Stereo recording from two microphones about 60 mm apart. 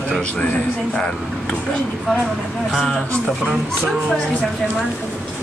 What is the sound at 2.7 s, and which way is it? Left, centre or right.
Speech, centre.